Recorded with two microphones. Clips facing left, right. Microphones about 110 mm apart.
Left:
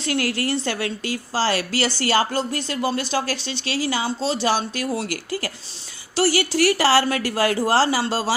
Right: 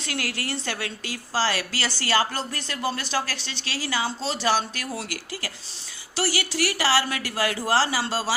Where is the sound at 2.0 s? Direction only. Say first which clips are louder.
Left 2 dB; 35° left (ahead or behind).